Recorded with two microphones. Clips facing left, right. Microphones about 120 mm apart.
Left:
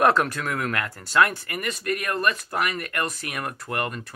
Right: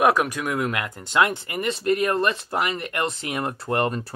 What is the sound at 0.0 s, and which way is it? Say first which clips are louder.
Speech: right 1 dB; 10° right (ahead or behind).